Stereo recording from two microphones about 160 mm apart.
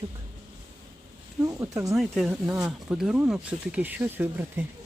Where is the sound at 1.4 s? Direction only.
20° right (ahead or behind).